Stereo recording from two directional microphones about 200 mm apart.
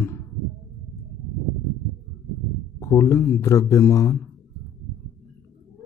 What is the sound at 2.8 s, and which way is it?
Speech, 15° left (ahead or behind).